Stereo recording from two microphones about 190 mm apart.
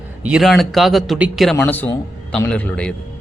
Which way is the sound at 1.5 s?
10° left (ahead or behind).